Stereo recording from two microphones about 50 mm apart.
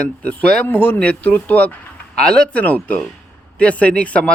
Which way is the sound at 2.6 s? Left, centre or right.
Left.